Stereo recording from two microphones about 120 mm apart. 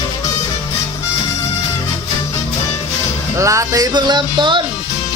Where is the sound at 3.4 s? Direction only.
25° right (ahead or behind); by 4.6 s 40° right (ahead or behind).